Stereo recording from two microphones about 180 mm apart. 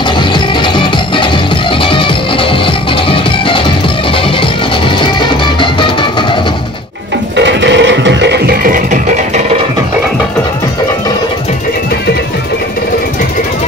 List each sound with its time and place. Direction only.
0.3 s music: 25° left (ahead or behind)
7.3 s music: 85° right; by 9.4 s 50° right (ahead or behind)